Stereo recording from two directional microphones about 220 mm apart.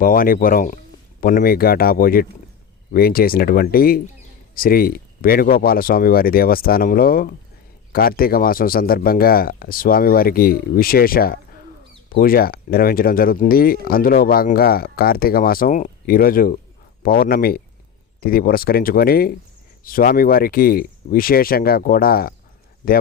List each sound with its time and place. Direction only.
0.0 s speech: 40° left (ahead or behind)